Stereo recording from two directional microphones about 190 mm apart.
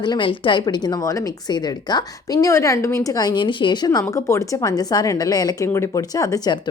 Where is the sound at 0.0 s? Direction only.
25° left (ahead or behind).